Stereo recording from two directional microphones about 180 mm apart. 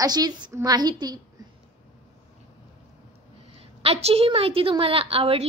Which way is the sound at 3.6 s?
35° right (ahead or behind).